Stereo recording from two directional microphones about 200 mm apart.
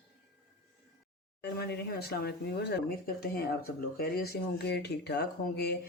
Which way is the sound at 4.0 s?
50° left (ahead or behind).